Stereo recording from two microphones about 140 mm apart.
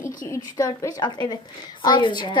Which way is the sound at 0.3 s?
25° left (ahead or behind).